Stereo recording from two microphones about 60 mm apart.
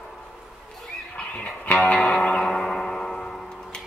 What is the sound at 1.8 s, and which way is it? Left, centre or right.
Music, centre.